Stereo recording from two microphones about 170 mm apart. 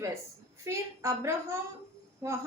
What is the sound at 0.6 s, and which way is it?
A woman's voice, 15° right (ahead or behind).